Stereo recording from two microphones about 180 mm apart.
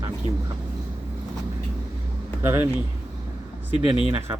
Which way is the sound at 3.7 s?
30° left (ahead or behind).